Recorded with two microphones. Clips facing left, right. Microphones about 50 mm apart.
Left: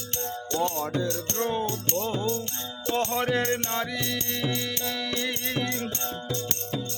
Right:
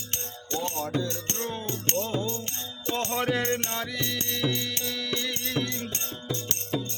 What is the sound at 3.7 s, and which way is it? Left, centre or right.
Music, centre.